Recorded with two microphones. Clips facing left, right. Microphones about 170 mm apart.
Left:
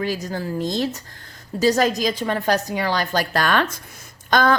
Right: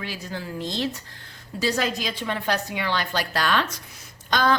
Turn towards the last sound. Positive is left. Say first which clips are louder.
# left 4 dB
turn(degrees=50)  # may be behind; listen again after turning